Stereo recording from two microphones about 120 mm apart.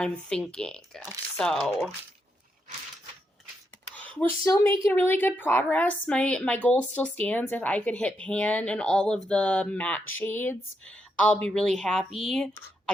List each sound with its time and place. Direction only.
0.0 s a woman's voice: 5° left (ahead or behind)
3.9 s a woman's voice: 10° left (ahead or behind)